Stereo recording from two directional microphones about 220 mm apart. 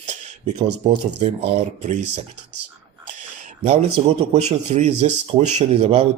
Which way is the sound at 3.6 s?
25° right (ahead or behind).